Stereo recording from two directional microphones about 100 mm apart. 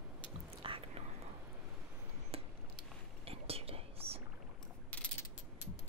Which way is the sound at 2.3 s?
75° right (ahead or behind).